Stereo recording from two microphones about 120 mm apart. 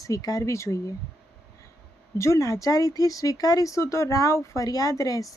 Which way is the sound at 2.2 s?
25° left (ahead or behind).